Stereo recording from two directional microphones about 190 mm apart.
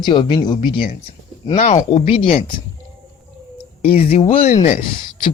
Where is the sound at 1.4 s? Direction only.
35° left (ahead or behind).